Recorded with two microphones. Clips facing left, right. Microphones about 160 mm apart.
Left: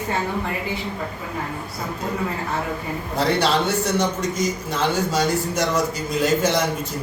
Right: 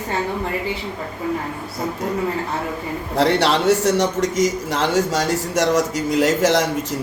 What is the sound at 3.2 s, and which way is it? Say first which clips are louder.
A man's voice: right 3 dB; 85° right.